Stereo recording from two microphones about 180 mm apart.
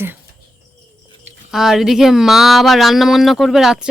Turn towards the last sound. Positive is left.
turn(degrees=-5)  # may be behind; listen again after turning